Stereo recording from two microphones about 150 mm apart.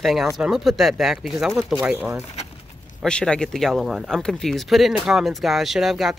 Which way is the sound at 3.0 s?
5° left (ahead or behind).